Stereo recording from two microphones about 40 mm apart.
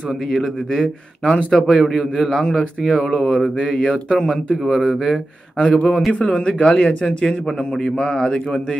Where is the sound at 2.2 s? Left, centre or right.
Centre.